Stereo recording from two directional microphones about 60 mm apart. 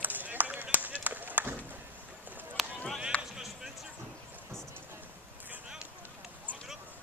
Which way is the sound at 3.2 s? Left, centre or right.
Centre.